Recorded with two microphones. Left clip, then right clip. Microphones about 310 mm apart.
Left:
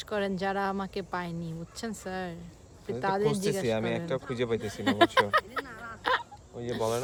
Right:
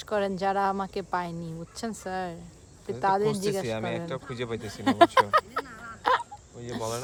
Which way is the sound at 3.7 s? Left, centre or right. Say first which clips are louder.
Left 2 dB; centre.